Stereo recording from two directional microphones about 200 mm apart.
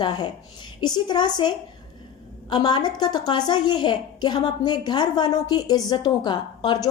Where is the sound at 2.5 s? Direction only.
20° left (ahead or behind).